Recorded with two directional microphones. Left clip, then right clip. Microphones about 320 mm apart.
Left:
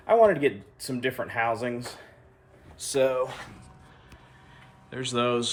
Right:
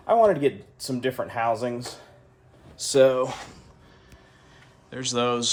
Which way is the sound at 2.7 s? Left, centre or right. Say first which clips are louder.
Right 6 dB; right.